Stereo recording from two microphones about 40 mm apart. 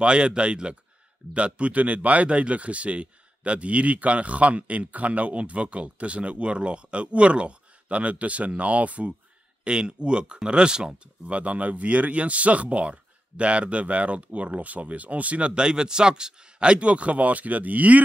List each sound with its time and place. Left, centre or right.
0.0 s speech: right
9.7 s speech: right
11.2 s speech: right
15.5 s speech: right